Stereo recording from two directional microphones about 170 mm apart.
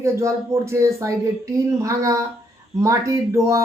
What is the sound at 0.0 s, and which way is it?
A woman's voice, 15° right (ahead or behind).